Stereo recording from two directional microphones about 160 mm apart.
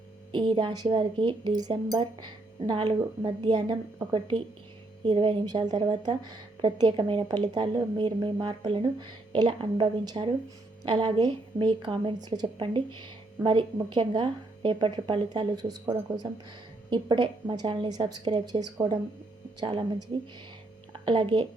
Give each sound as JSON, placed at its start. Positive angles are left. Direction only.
{"t": 0.3, "sound": "a woman's voice", "side_deg": -30}
{"t": 21.0, "sound": "a woman's voice", "side_deg": -30}